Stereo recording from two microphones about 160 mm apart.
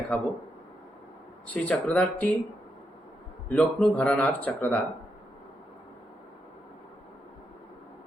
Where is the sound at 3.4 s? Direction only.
10° left (ahead or behind).